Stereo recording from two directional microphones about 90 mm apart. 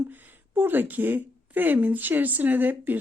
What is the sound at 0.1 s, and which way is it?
A woman's voice, 20° right (ahead or behind).